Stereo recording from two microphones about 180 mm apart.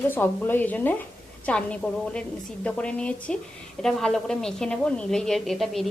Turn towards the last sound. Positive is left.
turn(degrees=0)  # may be behind; listen again after turning